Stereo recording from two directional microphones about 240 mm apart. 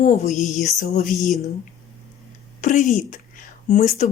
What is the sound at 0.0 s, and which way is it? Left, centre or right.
A woman's voice, left.